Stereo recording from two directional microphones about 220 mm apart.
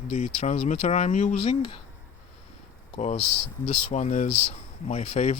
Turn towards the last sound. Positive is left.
turn(degrees=30)  # may be behind; listen again after turning